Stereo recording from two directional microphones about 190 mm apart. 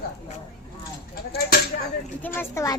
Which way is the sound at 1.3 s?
55° left (ahead or behind).